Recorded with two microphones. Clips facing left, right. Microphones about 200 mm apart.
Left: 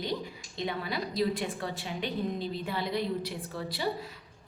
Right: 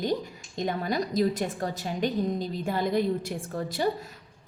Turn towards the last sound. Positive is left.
turn(degrees=-45)  # may be behind; listen again after turning